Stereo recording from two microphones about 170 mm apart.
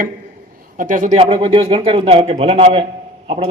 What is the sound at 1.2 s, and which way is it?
A man's voice, 30° right (ahead or behind).